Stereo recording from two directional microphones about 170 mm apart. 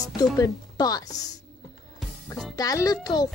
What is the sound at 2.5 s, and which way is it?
Speech, 20° left (ahead or behind).